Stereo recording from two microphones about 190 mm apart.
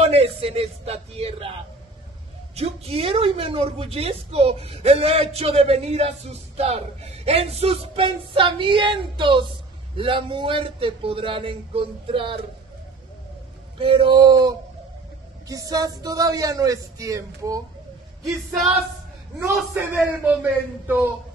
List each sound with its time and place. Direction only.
0.0 s a man's voice: 30° right (ahead or behind)
2.5 s a woman's voice: 30° right (ahead or behind)
13.7 s speech: 25° right (ahead or behind)
19.5 s speech: 5° right (ahead or behind)